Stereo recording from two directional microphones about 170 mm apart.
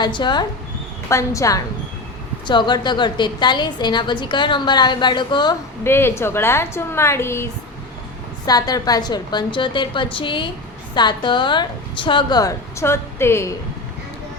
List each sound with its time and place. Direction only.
0.0 s a woman's voice: 25° left (ahead or behind)
5.8 s a woman's voice: 15° left (ahead or behind)